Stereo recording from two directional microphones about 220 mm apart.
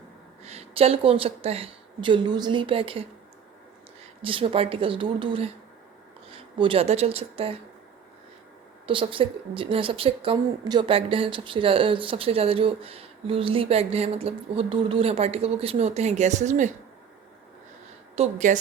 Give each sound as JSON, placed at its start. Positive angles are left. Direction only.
{"t": 0.4, "sound": "a woman's voice", "side_deg": -25}
{"t": 4.2, "sound": "a woman's voice", "side_deg": -25}
{"t": 8.9, "sound": "a woman's voice", "side_deg": -25}
{"t": 18.2, "sound": "a woman's voice", "side_deg": -35}